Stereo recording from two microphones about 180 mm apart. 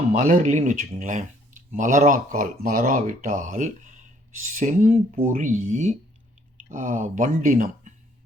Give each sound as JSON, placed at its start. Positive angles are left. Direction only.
{"t": 0.2, "sound": "speech", "side_deg": -45}